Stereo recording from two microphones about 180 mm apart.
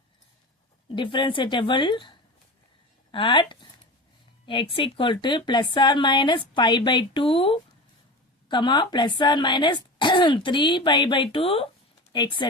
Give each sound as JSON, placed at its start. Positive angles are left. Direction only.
{"t": 0.9, "sound": "speech", "side_deg": 25}